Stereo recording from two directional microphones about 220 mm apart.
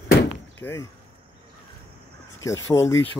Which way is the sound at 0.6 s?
10° left (ahead or behind).